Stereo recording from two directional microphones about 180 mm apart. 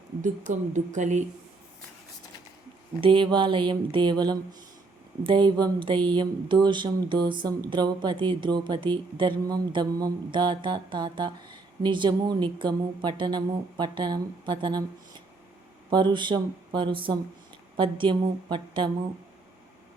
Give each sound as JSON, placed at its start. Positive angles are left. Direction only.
{"t": 0.7, "sound": "speech", "side_deg": -45}
{"t": 3.0, "sound": "speech", "side_deg": -30}